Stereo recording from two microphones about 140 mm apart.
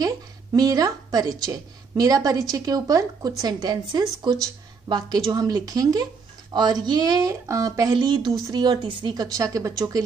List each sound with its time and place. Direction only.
0.0 s a woman's voice: 25° right (ahead or behind)